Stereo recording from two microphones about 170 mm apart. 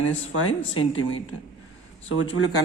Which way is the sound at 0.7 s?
30° left (ahead or behind).